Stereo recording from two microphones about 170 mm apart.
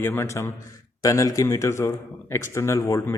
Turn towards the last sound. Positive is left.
turn(degrees=15)  # may be behind; listen again after turning